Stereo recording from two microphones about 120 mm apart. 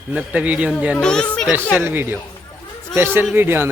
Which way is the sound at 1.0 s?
5° left (ahead or behind).